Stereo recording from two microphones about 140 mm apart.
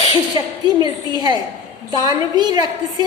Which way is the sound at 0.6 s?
30° right (ahead or behind).